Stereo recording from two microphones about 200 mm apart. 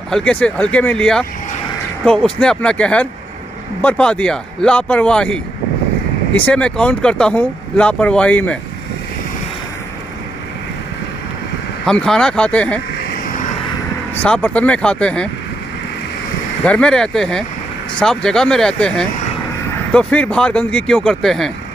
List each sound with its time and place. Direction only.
0.1 s speech: 5° left (ahead or behind)
11.8 s speech: 5° left (ahead or behind)
13.0 s vehicle: 50° left (ahead or behind)
14.2 s speech: 5° left (ahead or behind)
16.6 s speech: 5° left (ahead or behind)